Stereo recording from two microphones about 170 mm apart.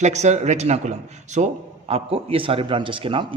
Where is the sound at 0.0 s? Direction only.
40° right (ahead or behind).